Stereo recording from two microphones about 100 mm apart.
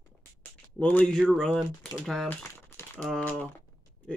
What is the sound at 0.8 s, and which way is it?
Speech, 15° left (ahead or behind).